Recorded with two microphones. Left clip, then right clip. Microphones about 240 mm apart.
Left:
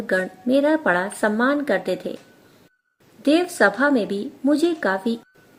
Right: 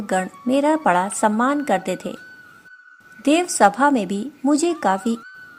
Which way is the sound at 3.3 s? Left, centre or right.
Right.